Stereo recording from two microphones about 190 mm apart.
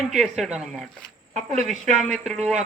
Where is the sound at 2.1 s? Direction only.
Centre (ahead or behind).